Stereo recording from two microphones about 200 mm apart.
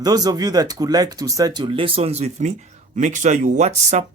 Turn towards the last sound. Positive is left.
turn(degrees=-35)  # may be behind; listen again after turning